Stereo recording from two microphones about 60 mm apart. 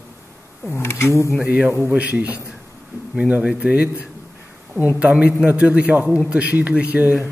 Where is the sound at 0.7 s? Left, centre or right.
Left.